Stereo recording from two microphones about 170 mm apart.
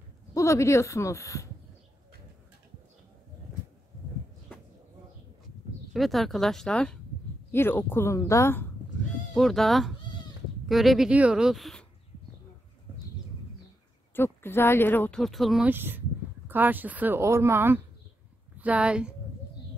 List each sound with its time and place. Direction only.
0.3 s speech: 20° left (ahead or behind)
5.9 s speech: centre (ahead or behind); by 8.6 s 15° left (ahead or behind)
9.3 s speech: centre (ahead or behind)
14.1 s speech: 15° left (ahead or behind); by 19.1 s 5° right (ahead or behind)